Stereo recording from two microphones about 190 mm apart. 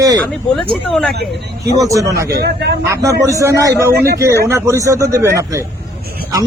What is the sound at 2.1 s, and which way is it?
Speech, 55° right (ahead or behind).